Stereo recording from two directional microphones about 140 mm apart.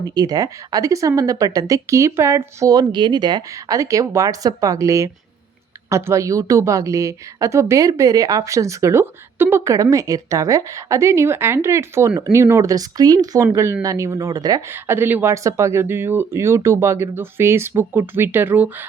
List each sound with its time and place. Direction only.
0.0 s a woman's voice: 30° right (ahead or behind)
14.7 s speech: 15° right (ahead or behind)